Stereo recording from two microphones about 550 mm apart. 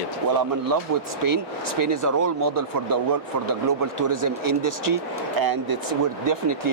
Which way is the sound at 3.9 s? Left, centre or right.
Right.